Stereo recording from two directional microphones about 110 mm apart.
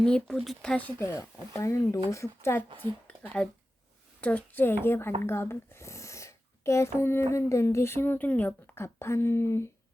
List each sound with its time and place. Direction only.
0.0 s speech: 5° left (ahead or behind)
1.0 s a child's voice: 25° left (ahead or behind)
4.2 s a child's voice: 15° left (ahead or behind)